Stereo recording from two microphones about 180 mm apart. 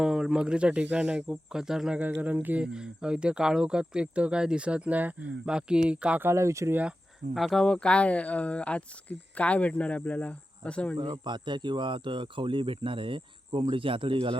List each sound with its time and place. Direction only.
0.0 s speech: 5° right (ahead or behind)
7.3 s speech: centre (ahead or behind)
10.9 s speech: 25° right (ahead or behind)